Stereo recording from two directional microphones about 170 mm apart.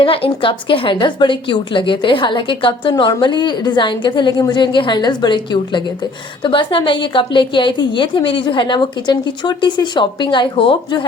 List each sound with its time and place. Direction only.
0.0 s a woman's voice: 35° left (ahead or behind)